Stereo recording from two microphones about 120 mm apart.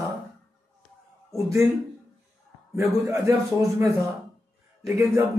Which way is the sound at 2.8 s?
25° right (ahead or behind).